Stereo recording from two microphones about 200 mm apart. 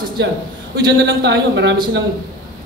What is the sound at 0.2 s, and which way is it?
A man's voice, 60° right (ahead or behind).